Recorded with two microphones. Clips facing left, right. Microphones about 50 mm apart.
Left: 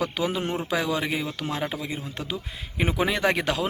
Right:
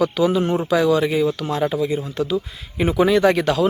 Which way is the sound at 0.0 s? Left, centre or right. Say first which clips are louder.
Right 9 dB; centre.